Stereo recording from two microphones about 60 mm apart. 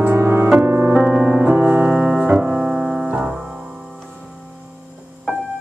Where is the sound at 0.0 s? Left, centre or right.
Right; by 3.1 s centre.